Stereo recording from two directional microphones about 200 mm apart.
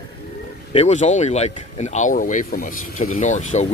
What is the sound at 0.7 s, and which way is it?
Speech, 35° left (ahead or behind).